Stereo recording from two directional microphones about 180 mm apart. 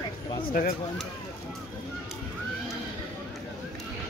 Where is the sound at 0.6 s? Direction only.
55° left (ahead or behind).